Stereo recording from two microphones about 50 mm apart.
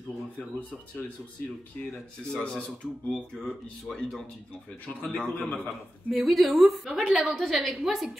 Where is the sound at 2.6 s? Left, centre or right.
Left.